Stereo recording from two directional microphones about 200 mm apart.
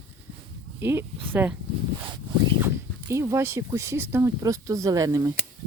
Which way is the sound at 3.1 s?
15° right (ahead or behind).